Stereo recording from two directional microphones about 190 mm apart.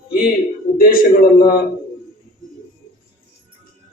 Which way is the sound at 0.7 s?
50° left (ahead or behind).